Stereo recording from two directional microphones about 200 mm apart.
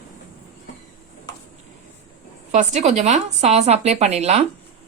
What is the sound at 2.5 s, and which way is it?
Speech, 35° right (ahead or behind).